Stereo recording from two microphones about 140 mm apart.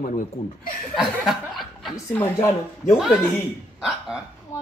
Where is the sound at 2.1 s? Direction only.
15° left (ahead or behind).